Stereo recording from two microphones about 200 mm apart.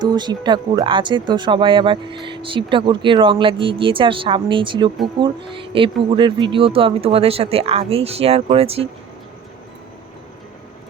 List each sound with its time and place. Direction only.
0.0 s speech: 20° right (ahead or behind)